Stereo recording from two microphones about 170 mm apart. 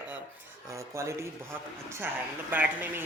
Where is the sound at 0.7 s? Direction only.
15° right (ahead or behind).